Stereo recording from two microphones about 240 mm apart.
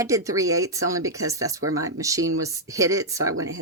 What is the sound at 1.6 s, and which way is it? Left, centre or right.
Speech, right.